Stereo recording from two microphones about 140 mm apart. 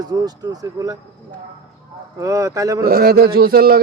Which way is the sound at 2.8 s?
90° right.